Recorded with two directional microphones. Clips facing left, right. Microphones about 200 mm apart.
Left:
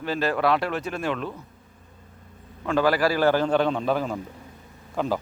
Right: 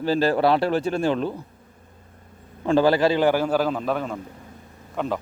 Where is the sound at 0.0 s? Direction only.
30° right (ahead or behind).